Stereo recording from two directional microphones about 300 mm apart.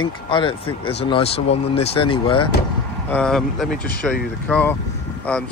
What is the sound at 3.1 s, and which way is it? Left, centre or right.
Speech, centre.